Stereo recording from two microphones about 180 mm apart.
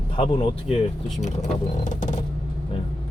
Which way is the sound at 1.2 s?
40° left (ahead or behind).